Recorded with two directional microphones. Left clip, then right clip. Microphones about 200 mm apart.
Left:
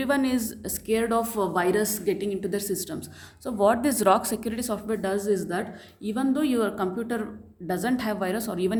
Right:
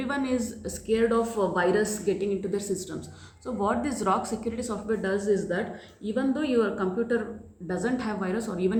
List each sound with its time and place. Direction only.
0.0 s speech: 45° left (ahead or behind)